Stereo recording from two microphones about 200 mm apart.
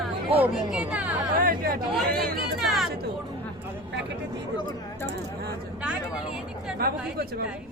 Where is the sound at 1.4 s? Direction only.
45° right (ahead or behind).